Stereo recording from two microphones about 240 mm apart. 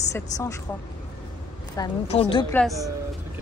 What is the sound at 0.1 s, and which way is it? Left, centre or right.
Speech, centre.